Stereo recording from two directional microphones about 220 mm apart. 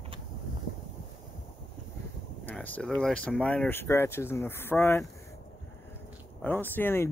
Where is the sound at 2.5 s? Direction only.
5° left (ahead or behind).